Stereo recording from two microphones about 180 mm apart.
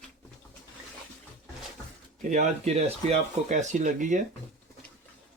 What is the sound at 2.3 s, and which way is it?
Speech, 40° right (ahead or behind).